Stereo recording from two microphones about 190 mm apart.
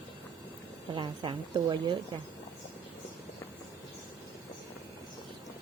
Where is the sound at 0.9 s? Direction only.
25° right (ahead or behind).